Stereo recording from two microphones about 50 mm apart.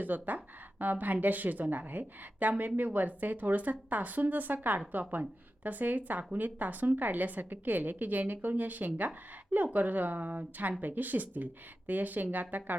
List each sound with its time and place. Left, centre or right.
0.0 s a woman's voice: right